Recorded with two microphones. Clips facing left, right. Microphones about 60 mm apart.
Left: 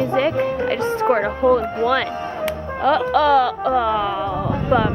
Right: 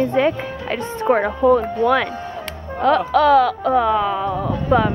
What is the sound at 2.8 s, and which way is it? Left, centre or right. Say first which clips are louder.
Music: right 2 dB; centre.